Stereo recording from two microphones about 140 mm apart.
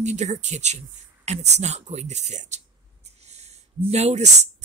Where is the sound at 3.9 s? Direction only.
55° right (ahead or behind).